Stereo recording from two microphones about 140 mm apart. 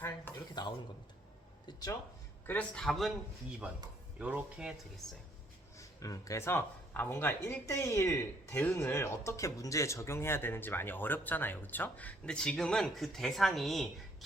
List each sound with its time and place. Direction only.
0.3 s a sound: 15° left (ahead or behind)
1.6 s speech: 25° left (ahead or behind)
2.5 s a man's voice: 10° left (ahead or behind)
4.2 s speech: 10° right (ahead or behind)
5.7 s speech: 25° left (ahead or behind); by 14.3 s centre (ahead or behind)